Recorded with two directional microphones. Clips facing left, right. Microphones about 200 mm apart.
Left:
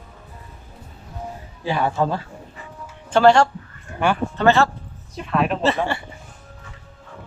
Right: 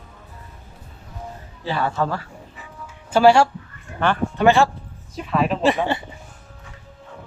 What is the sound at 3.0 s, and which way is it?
Speech, 10° right (ahead or behind).